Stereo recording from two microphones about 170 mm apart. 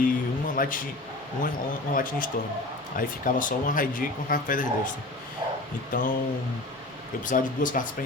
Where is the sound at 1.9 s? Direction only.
55° left (ahead or behind).